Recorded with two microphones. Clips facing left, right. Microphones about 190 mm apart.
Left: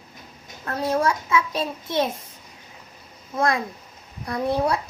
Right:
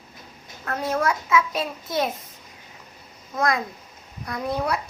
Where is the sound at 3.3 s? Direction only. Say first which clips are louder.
Left 1 dB; 30° left (ahead or behind).